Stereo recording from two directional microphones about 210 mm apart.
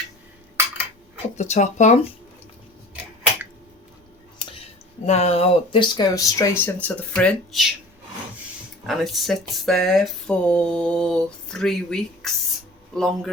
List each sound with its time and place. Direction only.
1.4 s speech: 35° left (ahead or behind)
5.0 s speech: 30° left (ahead or behind); by 7.7 s centre (ahead or behind)
8.9 s speech: centre (ahead or behind)